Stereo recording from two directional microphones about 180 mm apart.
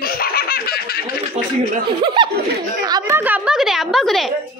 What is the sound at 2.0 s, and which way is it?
Chuckle, 25° right (ahead or behind).